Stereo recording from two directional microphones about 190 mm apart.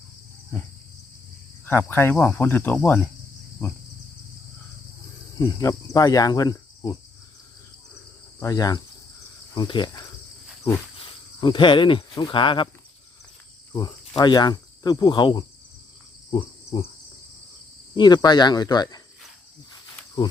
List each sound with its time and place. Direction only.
1.6 s speech: 10° left (ahead or behind)
5.4 s speech: 15° left (ahead or behind)
8.4 s speech: 20° left (ahead or behind)
14.2 s speech: 20° left (ahead or behind)
16.3 s cricket: 25° left (ahead or behind)
17.9 s speech: 20° left (ahead or behind)